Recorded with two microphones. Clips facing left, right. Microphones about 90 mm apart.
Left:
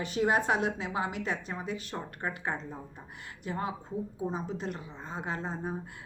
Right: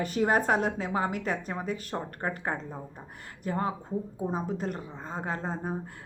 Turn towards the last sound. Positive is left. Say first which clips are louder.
# right 2 dB
turn(degrees=-45)  # may be behind; listen again after turning